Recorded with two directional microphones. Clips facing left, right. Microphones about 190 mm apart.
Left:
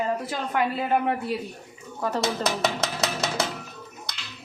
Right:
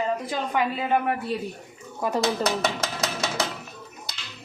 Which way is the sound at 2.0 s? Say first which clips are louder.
Right 1 dB; 10° right (ahead or behind).